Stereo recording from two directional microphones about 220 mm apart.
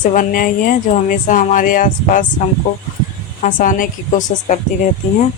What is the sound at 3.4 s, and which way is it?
Speech, 35° left (ahead or behind).